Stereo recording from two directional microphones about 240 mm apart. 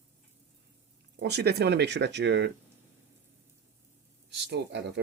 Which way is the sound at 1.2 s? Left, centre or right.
Right.